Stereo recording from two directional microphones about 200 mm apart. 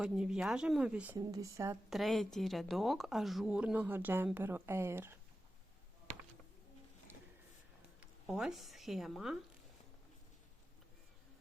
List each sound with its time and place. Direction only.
0.0 s speech: 5° right (ahead or behind)
1.2 s speech: 15° right (ahead or behind)
1.9 s speech: centre (ahead or behind)
8.3 s speech: centre (ahead or behind)